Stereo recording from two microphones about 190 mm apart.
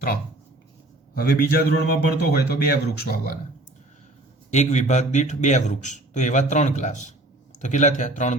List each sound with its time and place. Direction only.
1.1 s a man's voice: 55° left (ahead or behind)
4.5 s a man's voice: 40° left (ahead or behind)